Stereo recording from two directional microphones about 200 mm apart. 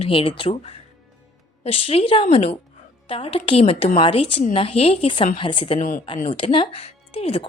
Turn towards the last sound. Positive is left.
turn(degrees=30)  # may be behind; listen again after turning